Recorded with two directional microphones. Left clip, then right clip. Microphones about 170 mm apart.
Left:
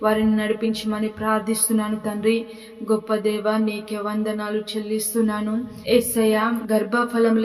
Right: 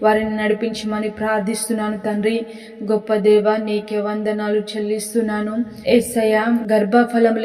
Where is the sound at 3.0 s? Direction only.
15° right (ahead or behind).